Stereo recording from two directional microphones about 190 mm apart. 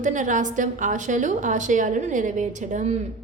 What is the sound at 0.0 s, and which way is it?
A woman's voice, 40° right (ahead or behind).